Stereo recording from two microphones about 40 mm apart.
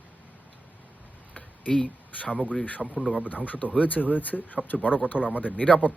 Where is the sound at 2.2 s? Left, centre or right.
Left.